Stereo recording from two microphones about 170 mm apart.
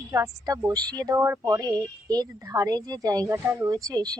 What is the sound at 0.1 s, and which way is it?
A woman's voice, 20° right (ahead or behind).